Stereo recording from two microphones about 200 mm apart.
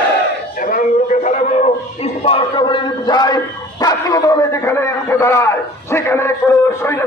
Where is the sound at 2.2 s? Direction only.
25° left (ahead or behind).